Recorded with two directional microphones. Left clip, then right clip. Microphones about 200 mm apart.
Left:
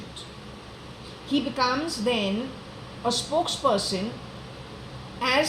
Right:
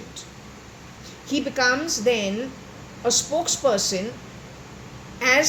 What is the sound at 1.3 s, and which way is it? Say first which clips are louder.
A woman's voice: right 3 dB; 30° right (ahead or behind).